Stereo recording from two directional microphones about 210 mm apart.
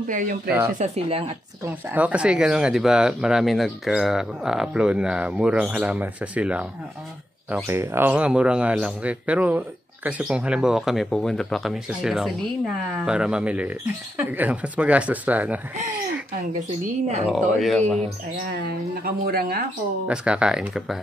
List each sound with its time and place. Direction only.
0.1 s speech: 40° right (ahead or behind)
0.7 s speech: 30° right (ahead or behind)
1.7 s speech: 10° right (ahead or behind)
17.3 s speech: centre (ahead or behind)
18.4 s speech: 45° right (ahead or behind)
20.1 s speech: 5° right (ahead or behind)